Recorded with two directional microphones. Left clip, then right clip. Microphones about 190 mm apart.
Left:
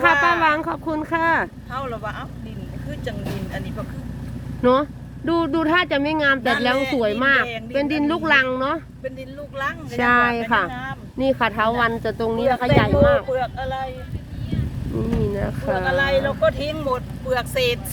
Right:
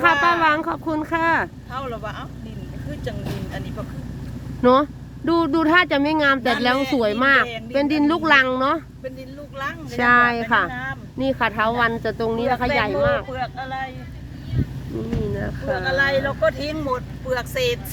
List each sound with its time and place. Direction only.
0.0 s speech: 5° left (ahead or behind)
4.6 s speech: 15° right (ahead or behind)
9.6 s speech: 5° left (ahead or behind)
11.2 s speech: 15° left (ahead or behind)
13.3 s speech: 45° left (ahead or behind)
15.4 s speech: 20° left (ahead or behind)